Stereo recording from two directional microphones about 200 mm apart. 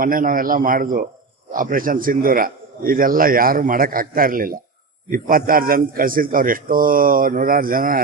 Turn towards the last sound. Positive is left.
turn(degrees=-45)  # may be behind; listen again after turning